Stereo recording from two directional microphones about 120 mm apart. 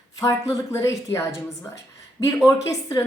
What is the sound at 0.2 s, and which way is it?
A woman's voice, 25° left (ahead or behind).